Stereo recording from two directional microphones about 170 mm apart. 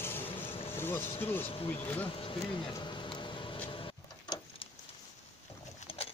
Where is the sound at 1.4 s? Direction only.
35° left (ahead or behind).